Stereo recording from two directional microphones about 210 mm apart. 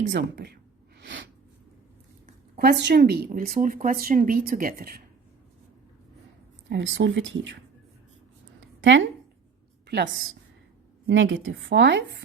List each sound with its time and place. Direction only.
0.1 s a woman's voice: 55° right (ahead or behind)
2.6 s speech: 50° right (ahead or behind)
6.7 s a woman's voice: 60° right (ahead or behind)
8.6 s a sound: 60° right (ahead or behind)
11.1 s a woman's voice: 65° right (ahead or behind)